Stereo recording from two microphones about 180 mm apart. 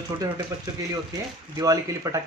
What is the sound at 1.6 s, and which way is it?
Speech, 20° right (ahead or behind).